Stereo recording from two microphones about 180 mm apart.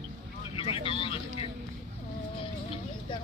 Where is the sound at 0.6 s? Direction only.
30° left (ahead or behind).